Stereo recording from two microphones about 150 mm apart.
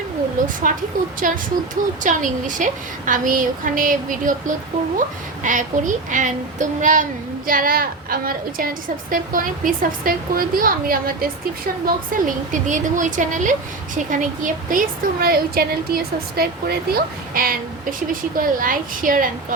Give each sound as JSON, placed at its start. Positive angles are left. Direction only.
{"t": 0.7, "sound": "a woman's voice", "side_deg": -60}
{"t": 7.4, "sound": "a woman's voice", "side_deg": -70}